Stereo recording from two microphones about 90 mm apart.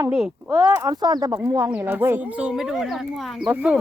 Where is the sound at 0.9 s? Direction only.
45° right (ahead or behind).